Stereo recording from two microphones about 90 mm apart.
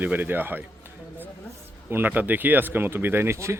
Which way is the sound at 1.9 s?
20° right (ahead or behind).